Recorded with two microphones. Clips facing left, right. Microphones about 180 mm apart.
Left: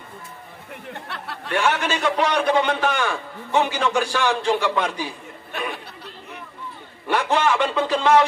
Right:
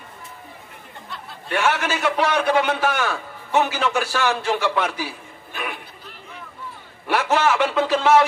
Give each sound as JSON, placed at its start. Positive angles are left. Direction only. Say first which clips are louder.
{"t": 0.8, "sound": "a sound", "louder": "left 5 dB", "side_deg": 70}
{"t": 1.6, "sound": "a man's voice", "louder": "even", "side_deg": -5}
{"t": 2.2, "sound": "speech", "louder": "even", "side_deg": 15}
{"t": 2.6, "sound": "a man's voice", "louder": "even", "side_deg": -5}
{"t": 7.1, "sound": "a man's voice", "louder": "right 1 dB", "side_deg": -5}